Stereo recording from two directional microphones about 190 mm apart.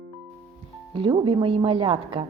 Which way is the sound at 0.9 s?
25° right (ahead or behind).